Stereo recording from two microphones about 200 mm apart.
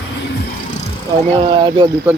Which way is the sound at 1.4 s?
25° right (ahead or behind).